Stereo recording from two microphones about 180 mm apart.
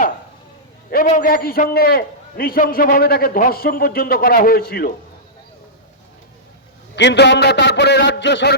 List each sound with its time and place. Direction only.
1.0 s a man's voice: 45° left (ahead or behind)
6.9 s a man's voice: 75° left (ahead or behind)